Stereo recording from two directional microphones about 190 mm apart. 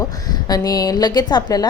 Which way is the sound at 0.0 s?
20° left (ahead or behind).